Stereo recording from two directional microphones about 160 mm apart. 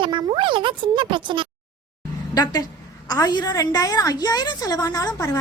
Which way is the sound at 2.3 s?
25° left (ahead or behind).